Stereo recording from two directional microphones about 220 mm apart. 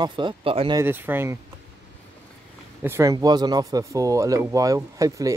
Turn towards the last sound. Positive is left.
turn(degrees=-15)  # may be behind; listen again after turning